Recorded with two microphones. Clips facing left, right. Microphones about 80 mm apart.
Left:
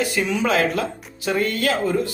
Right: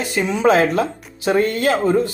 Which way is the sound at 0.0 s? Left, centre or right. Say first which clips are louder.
Right 4 dB; right.